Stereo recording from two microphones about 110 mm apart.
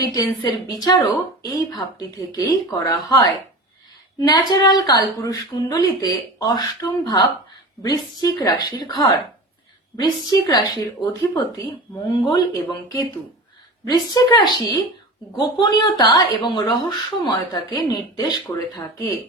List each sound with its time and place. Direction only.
0.1 s a woman's voice: 35° left (ahead or behind)